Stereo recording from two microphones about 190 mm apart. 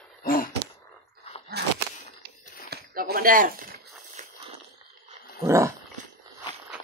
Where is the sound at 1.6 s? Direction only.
60° right (ahead or behind); by 4.3 s 40° right (ahead or behind).